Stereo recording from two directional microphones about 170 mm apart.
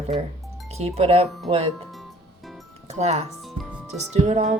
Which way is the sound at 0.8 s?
35° right (ahead or behind).